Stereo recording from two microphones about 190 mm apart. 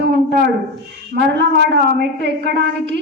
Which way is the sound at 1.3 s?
60° right (ahead or behind).